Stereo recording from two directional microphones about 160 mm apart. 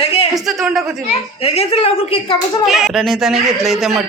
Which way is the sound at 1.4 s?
35° left (ahead or behind).